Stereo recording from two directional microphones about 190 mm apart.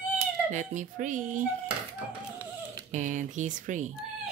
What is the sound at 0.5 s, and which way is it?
Speech, 40° right (ahead or behind).